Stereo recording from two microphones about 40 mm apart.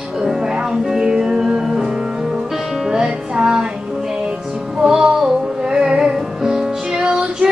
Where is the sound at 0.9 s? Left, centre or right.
Centre.